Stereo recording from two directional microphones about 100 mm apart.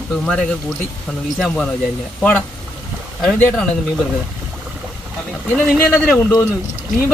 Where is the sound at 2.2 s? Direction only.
10° left (ahead or behind).